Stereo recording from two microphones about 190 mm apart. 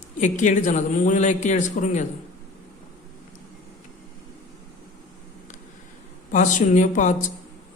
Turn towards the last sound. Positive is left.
turn(degrees=40)  # may be behind; listen again after turning